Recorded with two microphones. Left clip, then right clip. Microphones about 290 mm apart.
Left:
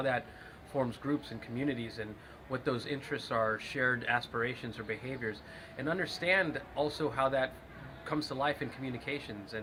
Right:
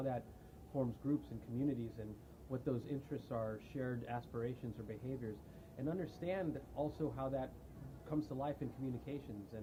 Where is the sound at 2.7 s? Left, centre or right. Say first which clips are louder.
Left 8 dB; centre.